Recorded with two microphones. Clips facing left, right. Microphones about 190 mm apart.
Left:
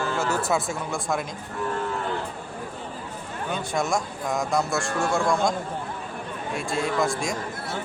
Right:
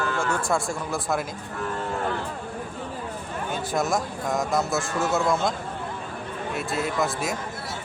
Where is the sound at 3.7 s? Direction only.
Centre (ahead or behind).